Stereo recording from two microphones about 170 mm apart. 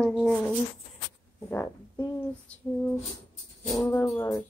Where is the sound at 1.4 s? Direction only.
20° left (ahead or behind).